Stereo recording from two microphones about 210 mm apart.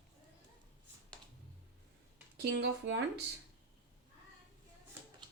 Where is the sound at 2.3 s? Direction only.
55° right (ahead or behind).